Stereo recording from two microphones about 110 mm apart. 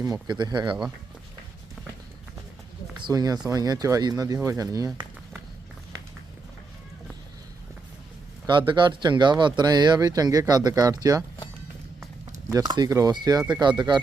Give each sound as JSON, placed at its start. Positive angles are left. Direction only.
{"t": 0.0, "sound": "speech", "side_deg": -35}
{"t": 3.1, "sound": "speech", "side_deg": -35}
{"t": 8.4, "sound": "speech", "side_deg": -45}
{"t": 12.5, "sound": "speech", "side_deg": -35}